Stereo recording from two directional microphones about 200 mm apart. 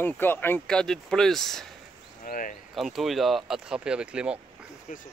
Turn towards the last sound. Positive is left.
turn(degrees=-5)  # may be behind; listen again after turning